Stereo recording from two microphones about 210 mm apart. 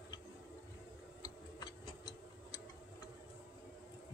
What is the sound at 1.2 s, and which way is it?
Tick-tock, 20° left (ahead or behind).